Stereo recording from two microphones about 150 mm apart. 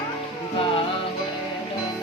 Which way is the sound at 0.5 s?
40° left (ahead or behind).